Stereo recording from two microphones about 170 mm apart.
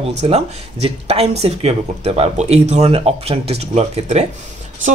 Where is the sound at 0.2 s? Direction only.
35° right (ahead or behind).